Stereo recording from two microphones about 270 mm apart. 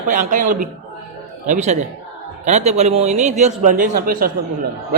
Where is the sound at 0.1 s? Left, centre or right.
Right.